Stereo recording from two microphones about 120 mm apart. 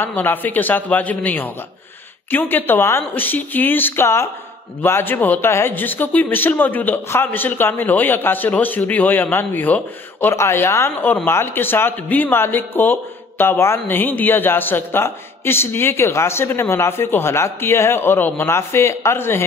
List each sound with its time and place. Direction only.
0.0 s speech: 15° left (ahead or behind)